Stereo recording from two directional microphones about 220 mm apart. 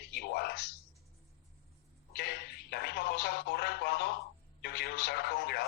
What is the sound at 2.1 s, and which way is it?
Speech, 45° left (ahead or behind).